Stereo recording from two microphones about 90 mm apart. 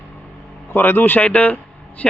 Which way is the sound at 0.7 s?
20° left (ahead or behind).